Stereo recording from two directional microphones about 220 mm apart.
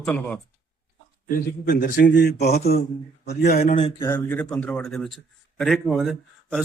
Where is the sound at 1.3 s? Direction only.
40° left (ahead or behind).